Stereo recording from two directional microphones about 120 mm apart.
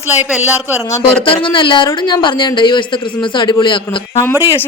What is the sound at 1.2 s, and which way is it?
Speech, 45° left (ahead or behind).